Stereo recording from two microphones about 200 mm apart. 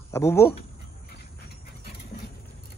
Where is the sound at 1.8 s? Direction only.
55° left (ahead or behind).